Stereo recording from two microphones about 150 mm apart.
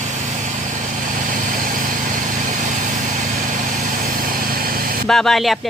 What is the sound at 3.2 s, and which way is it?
Vehicle, 60° right (ahead or behind).